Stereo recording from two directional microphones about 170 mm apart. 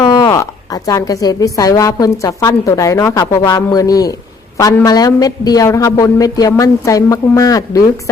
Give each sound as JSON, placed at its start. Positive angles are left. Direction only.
{"t": 0.0, "sound": "a woman's voice", "side_deg": 25}